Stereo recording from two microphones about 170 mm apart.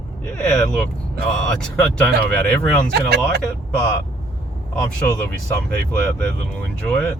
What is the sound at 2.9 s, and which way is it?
Speech, 75° right (ahead or behind).